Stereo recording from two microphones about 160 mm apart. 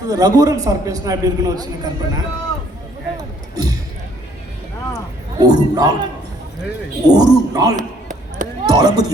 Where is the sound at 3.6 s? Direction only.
20° right (ahead or behind).